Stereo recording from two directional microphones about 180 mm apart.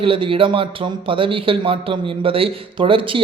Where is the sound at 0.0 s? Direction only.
30° right (ahead or behind).